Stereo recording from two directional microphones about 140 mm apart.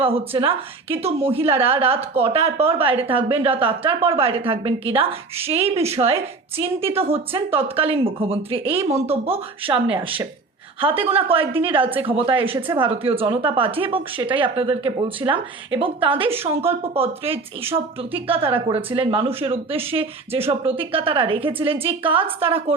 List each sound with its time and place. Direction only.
0.0 s a woman's voice: 40° right (ahead or behind)